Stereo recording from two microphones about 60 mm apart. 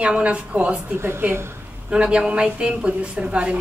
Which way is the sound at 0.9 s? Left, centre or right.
Right.